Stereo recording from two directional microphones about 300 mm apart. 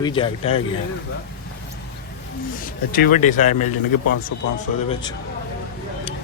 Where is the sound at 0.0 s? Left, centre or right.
Centre.